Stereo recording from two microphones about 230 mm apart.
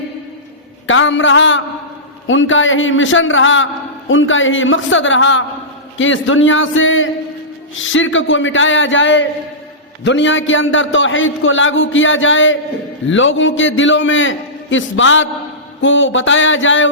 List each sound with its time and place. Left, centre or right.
0.9 s a man's voice: left